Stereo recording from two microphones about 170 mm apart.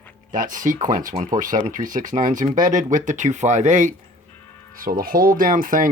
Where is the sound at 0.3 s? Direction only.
50° right (ahead or behind).